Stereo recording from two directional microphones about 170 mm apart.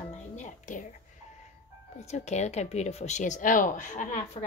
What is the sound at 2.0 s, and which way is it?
A woman's voice, 40° left (ahead or behind).